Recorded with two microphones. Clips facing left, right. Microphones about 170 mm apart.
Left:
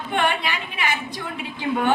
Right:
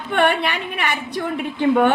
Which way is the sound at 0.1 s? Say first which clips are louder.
Right 5 dB; 60° right (ahead or behind).